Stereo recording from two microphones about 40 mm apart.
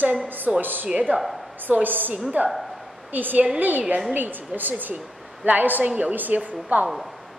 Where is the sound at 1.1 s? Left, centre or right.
Right.